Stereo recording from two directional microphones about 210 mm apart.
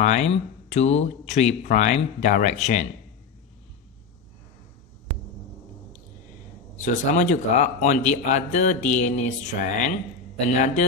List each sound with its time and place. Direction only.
0.0 s a man's voice: 30° left (ahead or behind)
6.8 s a man's voice: 35° left (ahead or behind)